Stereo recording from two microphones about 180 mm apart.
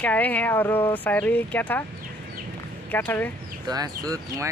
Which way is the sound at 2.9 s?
10° left (ahead or behind).